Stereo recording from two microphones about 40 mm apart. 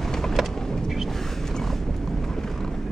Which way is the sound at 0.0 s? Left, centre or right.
Centre.